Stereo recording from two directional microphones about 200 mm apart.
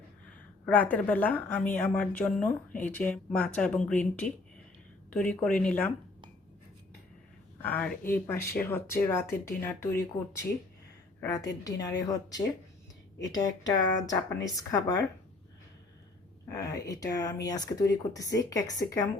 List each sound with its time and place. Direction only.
0.6 s a woman's voice: 10° left (ahead or behind)
7.6 s a woman's voice: 5° left (ahead or behind)
16.5 s a woman's voice: 15° left (ahead or behind)